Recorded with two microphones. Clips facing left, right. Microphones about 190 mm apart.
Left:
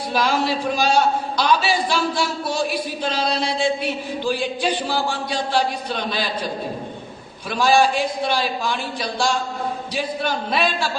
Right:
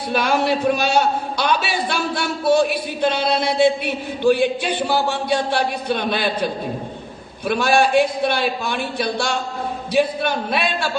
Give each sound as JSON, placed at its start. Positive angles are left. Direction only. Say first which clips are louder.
{"t": 0.1, "sound": "a man's voice", "louder": "right 2 dB", "side_deg": -60}
{"t": 7.4, "sound": "a man's voice", "louder": "even", "side_deg": -60}